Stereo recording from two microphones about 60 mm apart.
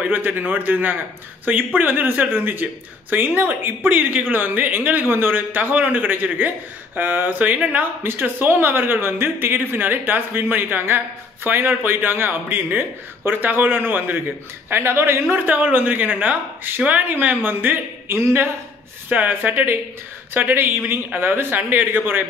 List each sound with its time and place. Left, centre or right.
0.1 s a man's voice: right
8.0 s a man's voice: right